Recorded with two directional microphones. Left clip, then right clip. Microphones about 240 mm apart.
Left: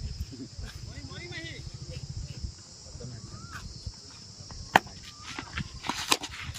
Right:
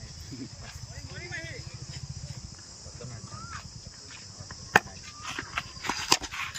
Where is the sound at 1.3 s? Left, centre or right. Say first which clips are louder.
Right 3 dB; left.